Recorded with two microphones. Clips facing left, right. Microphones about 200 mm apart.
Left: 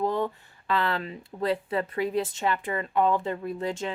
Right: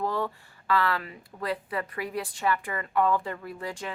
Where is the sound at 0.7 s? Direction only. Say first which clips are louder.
Even; 20° left (ahead or behind).